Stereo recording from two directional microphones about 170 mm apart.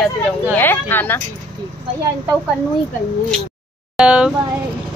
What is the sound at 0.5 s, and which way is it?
Speech, 10° left (ahead or behind).